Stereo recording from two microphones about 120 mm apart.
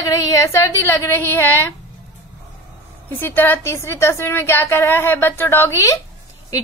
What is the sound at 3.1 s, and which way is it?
A woman's voice, 15° left (ahead or behind).